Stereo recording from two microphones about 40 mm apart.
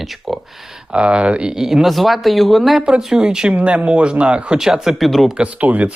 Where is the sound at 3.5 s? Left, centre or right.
Right.